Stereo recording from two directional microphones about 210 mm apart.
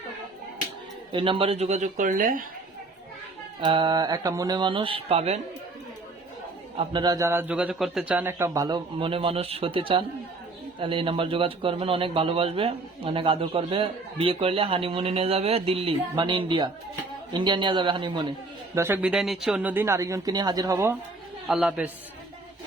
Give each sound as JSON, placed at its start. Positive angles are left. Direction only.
{"t": 1.1, "sound": "speech", "side_deg": -25}
{"t": 3.6, "sound": "speech", "side_deg": -20}
{"t": 6.7, "sound": "a man's voice", "side_deg": -20}
{"t": 21.4, "sound": "a man's voice", "side_deg": 0}